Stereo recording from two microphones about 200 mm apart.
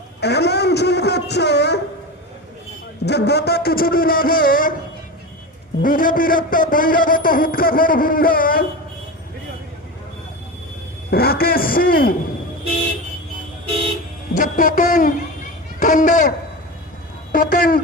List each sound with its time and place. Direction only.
0.2 s a sound: 55° left (ahead or behind)
3.1 s a man's voice: 55° left (ahead or behind)
5.8 s a man's voice: 45° left (ahead or behind)
11.1 s a man's voice: 50° left (ahead or behind)
14.3 s speech: 40° left (ahead or behind)
17.3 s speech: 45° left (ahead or behind)